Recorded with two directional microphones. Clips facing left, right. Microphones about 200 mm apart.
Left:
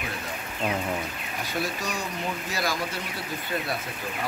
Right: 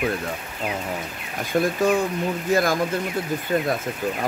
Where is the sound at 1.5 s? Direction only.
50° right (ahead or behind).